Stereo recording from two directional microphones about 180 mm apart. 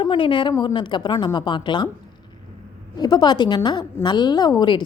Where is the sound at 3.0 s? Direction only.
25° left (ahead or behind).